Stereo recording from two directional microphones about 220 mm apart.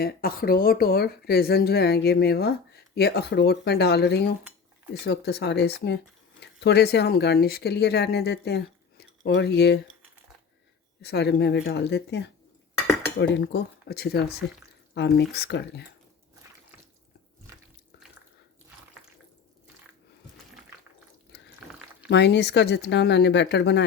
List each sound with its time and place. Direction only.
0.0 s speech: 40° left (ahead or behind)
11.0 s speech: 50° left (ahead or behind)
22.1 s speech: 50° left (ahead or behind)